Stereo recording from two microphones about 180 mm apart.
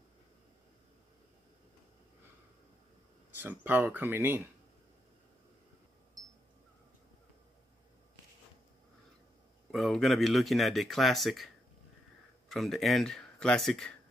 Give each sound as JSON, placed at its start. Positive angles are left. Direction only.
{"t": 3.3, "sound": "speech", "side_deg": -10}
{"t": 9.7, "sound": "speech", "side_deg": 0}